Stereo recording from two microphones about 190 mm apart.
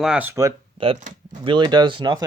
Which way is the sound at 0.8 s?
35° right (ahead or behind).